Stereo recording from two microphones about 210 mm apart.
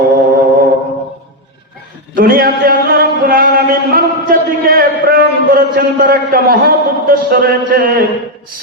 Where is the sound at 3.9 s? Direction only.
45° right (ahead or behind).